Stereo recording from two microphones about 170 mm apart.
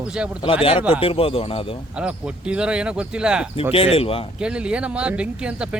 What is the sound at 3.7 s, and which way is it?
Speech, 35° left (ahead or behind).